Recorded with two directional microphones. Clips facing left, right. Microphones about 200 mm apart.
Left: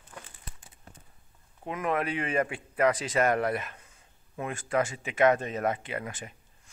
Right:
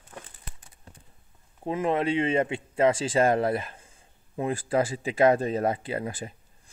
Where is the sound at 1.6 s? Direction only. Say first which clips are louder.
Right 4 dB; 30° right (ahead or behind).